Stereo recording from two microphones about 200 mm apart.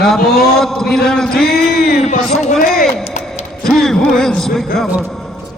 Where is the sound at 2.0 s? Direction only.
40° left (ahead or behind).